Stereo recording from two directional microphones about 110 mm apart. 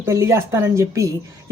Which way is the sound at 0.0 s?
25° right (ahead or behind).